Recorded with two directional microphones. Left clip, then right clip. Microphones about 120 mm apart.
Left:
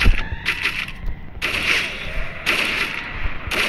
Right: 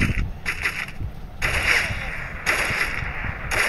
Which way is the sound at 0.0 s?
20° right (ahead or behind).